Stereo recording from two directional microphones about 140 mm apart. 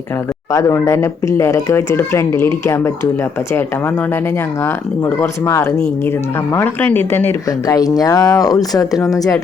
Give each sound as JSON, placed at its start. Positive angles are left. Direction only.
{"t": 0.5, "sound": "speech", "side_deg": 20}
{"t": 5.0, "sound": "speech", "side_deg": 20}
{"t": 7.8, "sound": "speech", "side_deg": 25}